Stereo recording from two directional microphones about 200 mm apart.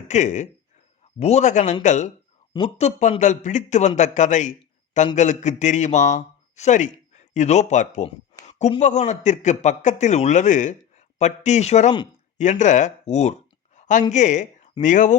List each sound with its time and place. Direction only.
0.1 s speech: 35° left (ahead or behind)